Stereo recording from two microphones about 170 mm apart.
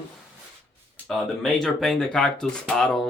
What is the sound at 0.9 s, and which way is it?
Speech, centre (ahead or behind).